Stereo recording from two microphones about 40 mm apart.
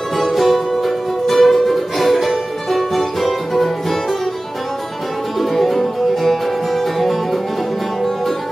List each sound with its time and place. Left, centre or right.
0.2 s music: centre
5.4 s music: centre